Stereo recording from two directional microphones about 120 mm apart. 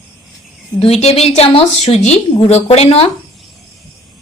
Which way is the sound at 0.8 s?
60° left (ahead or behind).